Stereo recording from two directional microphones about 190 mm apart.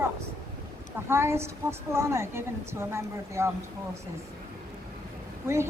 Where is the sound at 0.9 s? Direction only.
15° right (ahead or behind).